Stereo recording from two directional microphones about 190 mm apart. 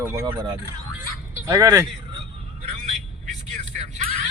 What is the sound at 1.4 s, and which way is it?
Speech, 15° right (ahead or behind).